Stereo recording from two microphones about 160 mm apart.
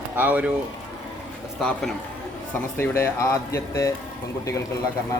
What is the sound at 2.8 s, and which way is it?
Speech, 15° left (ahead or behind).